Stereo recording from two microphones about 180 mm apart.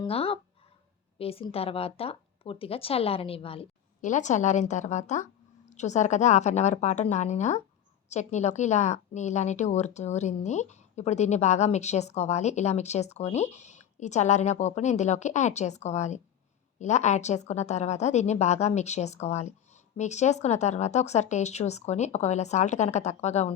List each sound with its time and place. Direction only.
0.0 s a woman's voice: 30° left (ahead or behind)